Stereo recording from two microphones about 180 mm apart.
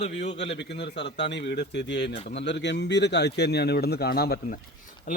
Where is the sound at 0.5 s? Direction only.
70° left (ahead or behind).